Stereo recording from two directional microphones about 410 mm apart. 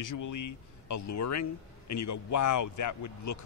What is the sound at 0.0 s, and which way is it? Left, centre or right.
Speech, left.